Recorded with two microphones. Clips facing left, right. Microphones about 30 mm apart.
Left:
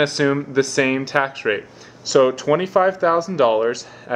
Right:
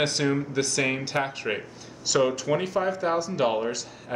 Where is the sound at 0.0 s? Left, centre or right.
Centre.